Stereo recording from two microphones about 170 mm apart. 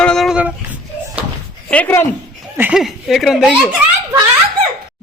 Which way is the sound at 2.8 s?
Centre (ahead or behind).